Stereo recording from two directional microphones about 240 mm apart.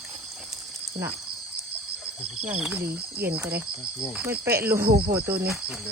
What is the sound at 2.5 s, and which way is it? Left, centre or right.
Speech, centre.